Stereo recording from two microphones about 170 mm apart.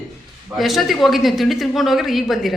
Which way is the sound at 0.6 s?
Centre (ahead or behind).